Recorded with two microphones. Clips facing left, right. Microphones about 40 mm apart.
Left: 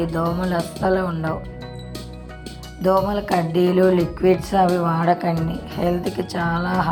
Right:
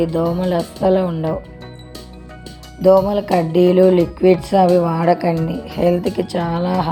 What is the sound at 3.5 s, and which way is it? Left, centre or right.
Speech, right.